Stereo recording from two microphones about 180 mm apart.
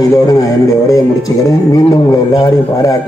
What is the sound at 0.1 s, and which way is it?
A man's voice, 20° left (ahead or behind).